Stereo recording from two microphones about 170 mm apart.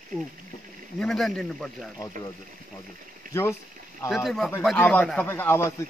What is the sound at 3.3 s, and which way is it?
Speech, 15° left (ahead or behind).